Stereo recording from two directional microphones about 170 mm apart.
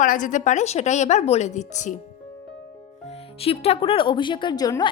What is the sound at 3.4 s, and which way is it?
A woman's voice, 35° left (ahead or behind).